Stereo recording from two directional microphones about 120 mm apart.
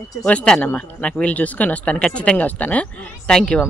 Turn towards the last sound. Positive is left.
turn(degrees=5)  # may be behind; listen again after turning